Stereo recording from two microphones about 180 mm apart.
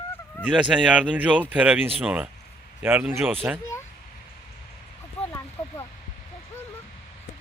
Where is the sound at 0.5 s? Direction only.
5° right (ahead or behind).